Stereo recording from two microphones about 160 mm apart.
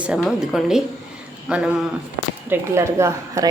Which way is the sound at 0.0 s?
5° right (ahead or behind).